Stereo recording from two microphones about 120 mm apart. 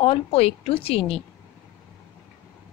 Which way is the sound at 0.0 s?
50° left (ahead or behind).